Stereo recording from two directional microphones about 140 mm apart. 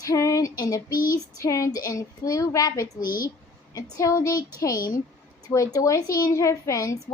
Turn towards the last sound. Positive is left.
turn(degrees=20)  # may be behind; listen again after turning